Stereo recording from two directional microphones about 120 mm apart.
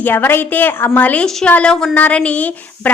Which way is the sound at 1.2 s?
5° left (ahead or behind).